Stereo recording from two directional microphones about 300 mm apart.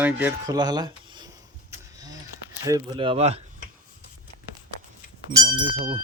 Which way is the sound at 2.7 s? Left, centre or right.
Centre.